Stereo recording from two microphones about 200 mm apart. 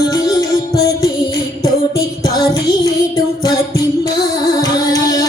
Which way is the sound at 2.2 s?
20° left (ahead or behind).